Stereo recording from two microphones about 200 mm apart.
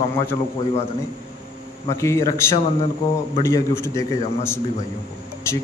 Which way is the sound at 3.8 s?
15° left (ahead or behind).